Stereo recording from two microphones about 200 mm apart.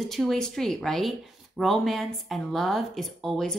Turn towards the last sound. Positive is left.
turn(degrees=0)  # may be behind; listen again after turning